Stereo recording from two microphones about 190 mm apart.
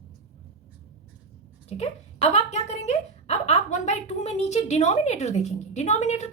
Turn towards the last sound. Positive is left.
turn(degrees=35)  # may be behind; listen again after turning